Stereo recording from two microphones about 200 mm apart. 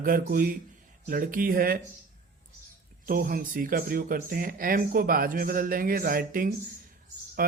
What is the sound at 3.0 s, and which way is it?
Speech, 45° right (ahead or behind).